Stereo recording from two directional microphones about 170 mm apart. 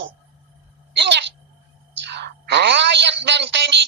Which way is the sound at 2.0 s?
90° right.